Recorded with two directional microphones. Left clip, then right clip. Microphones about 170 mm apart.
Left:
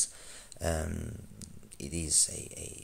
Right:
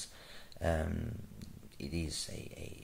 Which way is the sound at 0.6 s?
20° left (ahead or behind).